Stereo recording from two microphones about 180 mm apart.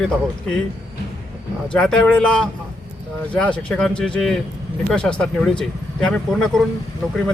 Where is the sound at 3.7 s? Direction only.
5° left (ahead or behind).